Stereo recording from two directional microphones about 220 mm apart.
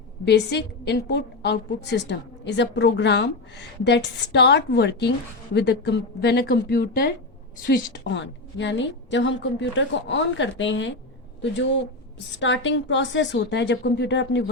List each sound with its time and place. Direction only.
0.3 s a woman's voice: 50° left (ahead or behind)
12.3 s a woman's voice: 55° left (ahead or behind)